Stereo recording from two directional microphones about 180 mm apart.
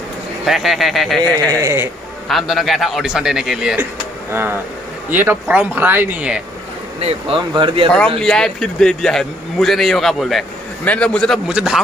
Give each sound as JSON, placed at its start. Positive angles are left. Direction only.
{"t": 0.5, "sound": "a man's voice", "side_deg": 0}
{"t": 1.6, "sound": "speech", "side_deg": -15}
{"t": 2.2, "sound": "a man's voice", "side_deg": 0}
{"t": 7.0, "sound": "speech", "side_deg": -30}
{"t": 8.2, "sound": "a man's voice", "side_deg": 5}